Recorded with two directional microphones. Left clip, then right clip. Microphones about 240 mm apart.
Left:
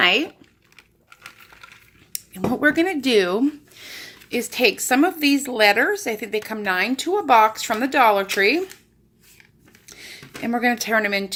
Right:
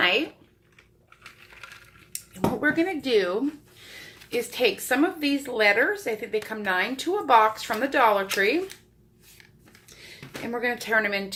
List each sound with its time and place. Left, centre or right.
0.0 s speech: left
2.1 s speech: left
9.8 s speech: left